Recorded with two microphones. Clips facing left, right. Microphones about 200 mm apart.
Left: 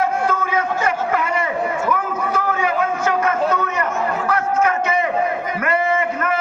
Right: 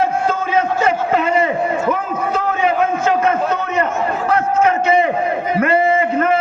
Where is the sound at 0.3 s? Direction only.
25° right (ahead or behind).